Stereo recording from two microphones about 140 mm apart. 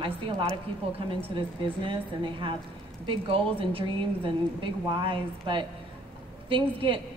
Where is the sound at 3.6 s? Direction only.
40° right (ahead or behind).